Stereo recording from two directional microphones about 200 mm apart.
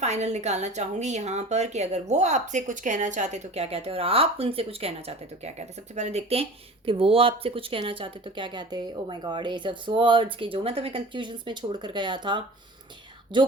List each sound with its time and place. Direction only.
0.0 s a woman's voice: 35° right (ahead or behind)